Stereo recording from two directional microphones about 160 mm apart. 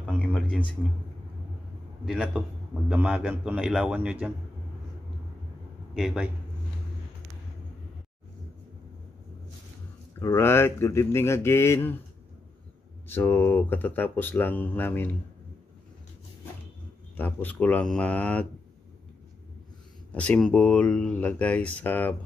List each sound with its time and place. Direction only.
0.0 s a sound: 5° left (ahead or behind)
2.0 s a man's voice: 5° right (ahead or behind)
5.9 s a man's voice: 5° right (ahead or behind)
10.1 s speech: 15° left (ahead or behind)
13.1 s speech: 15° left (ahead or behind)
17.2 s speech: 10° left (ahead or behind)
20.1 s speech: 10° left (ahead or behind)